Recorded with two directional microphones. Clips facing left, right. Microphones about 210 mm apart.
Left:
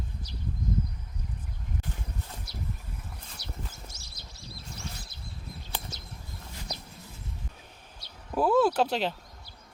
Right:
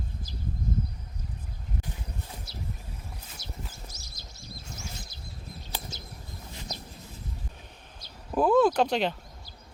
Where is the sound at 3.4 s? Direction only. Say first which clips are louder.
Left 2 dB; 65° left (ahead or behind).